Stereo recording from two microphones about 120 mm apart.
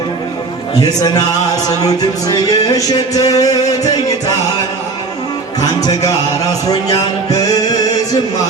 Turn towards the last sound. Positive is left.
turn(degrees=30)  # may be behind; listen again after turning